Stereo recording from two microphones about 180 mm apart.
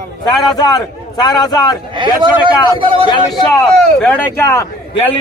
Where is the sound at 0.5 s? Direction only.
20° left (ahead or behind).